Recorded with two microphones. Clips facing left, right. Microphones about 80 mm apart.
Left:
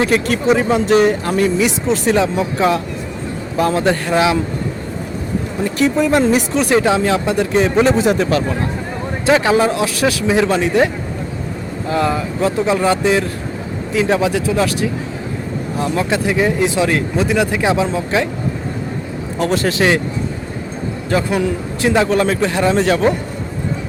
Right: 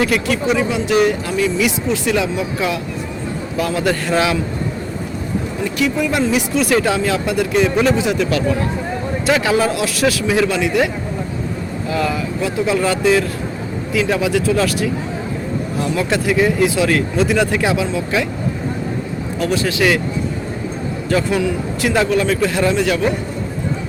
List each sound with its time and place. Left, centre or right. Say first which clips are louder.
0.0 s speech: left 2 dB; left
5.6 s speech: left 4 dB; left
6.5 s speech: left 2 dB; left
7.9 s speech: left 3 dB; left
11.9 s speech: left 3 dB; left
15.8 s speech: left 2 dB; left
19.4 s speech: left 2 dB; left
21.1 s speech: even; left
22.1 s speech: left 1 dB; left
22.7 s speech: left 3 dB; left